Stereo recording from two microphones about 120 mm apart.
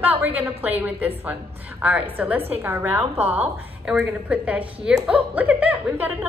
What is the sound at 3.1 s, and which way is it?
Speech, 60° right (ahead or behind).